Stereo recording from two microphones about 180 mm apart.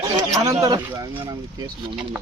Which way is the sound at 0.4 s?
20° right (ahead or behind).